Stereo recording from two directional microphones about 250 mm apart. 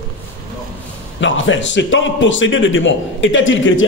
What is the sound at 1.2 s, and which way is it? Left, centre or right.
A man's voice, left.